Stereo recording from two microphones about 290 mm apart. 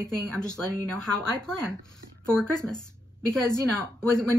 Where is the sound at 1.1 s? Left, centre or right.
Centre.